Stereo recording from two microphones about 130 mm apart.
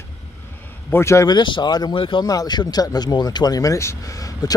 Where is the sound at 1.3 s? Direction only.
35° left (ahead or behind).